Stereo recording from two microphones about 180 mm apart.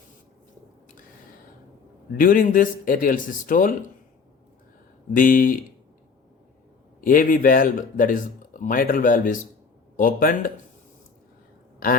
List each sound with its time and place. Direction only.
2.1 s speech: 50° left (ahead or behind)
5.1 s speech: 50° left (ahead or behind)
7.0 s speech: 50° left (ahead or behind)